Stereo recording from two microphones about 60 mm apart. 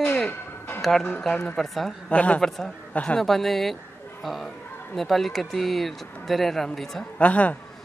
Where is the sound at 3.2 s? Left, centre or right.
Centre.